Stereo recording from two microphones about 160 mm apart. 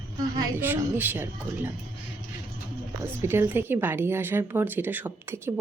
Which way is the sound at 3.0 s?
15° right (ahead or behind).